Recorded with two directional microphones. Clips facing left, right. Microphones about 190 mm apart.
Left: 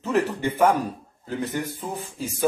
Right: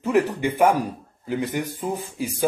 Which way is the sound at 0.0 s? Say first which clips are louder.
Right 3 dB; 10° right (ahead or behind).